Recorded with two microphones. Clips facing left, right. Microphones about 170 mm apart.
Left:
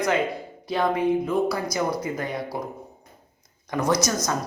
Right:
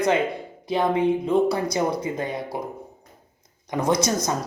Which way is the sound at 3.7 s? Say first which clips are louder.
Right 1 dB; 25° right (ahead or behind).